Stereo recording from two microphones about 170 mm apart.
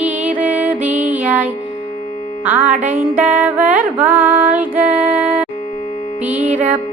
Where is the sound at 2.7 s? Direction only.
45° right (ahead or behind).